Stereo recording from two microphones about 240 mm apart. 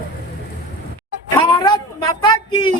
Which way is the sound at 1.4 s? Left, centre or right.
Centre.